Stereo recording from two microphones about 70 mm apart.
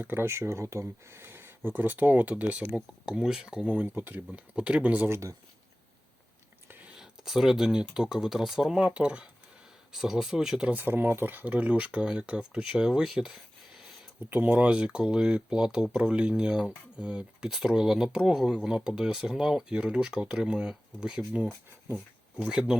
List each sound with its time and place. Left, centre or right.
0.0 s speech: right
0.3 s speech: right
2.7 s speech: centre
3.8 s speech: right
4.3 s speech: centre
7.0 s speech: centre
10.7 s speech: right; by 13.8 s centre
14.3 s speech: right
14.7 s speech: centre